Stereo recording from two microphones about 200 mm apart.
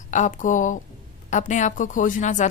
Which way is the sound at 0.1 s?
40° left (ahead or behind).